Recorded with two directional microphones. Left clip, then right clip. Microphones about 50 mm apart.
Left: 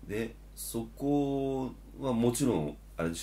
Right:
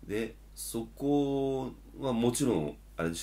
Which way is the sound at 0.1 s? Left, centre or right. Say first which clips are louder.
Right 1 dB; centre.